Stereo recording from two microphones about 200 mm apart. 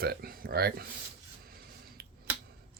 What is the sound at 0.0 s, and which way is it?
Speech, 50° right (ahead or behind).